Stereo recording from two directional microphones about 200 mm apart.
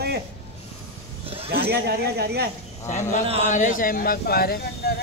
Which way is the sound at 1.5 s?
50° right (ahead or behind).